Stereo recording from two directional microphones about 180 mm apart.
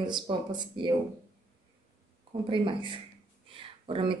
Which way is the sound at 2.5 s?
25° right (ahead or behind).